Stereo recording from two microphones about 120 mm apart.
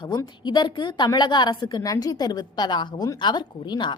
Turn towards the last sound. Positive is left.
turn(degrees=40)  # may be behind; listen again after turning